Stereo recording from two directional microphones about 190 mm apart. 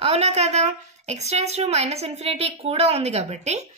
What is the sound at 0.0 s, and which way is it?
A woman's voice, 35° right (ahead or behind).